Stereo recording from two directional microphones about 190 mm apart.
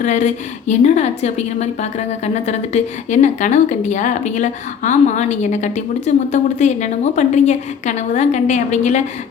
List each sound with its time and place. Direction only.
0.0 s a woman's voice: 40° left (ahead or behind)